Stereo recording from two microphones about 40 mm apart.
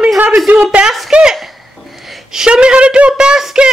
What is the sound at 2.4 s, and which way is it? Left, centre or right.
Speech, right.